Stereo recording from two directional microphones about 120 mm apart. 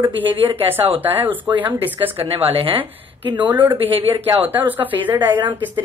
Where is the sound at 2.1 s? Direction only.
55° right (ahead or behind).